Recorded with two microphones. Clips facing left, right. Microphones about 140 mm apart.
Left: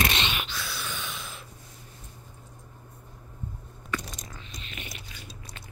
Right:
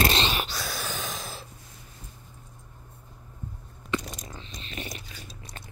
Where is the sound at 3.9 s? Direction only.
30° right (ahead or behind).